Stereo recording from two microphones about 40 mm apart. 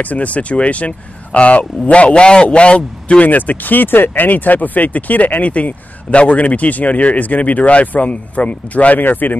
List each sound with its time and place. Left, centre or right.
0.0 s speech: left
3.3 s speech: left